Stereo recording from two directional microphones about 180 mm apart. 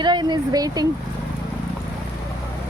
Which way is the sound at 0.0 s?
25° right (ahead or behind).